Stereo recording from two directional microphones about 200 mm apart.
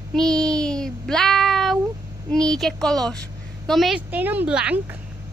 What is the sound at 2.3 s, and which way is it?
A child's voice, 5° left (ahead or behind).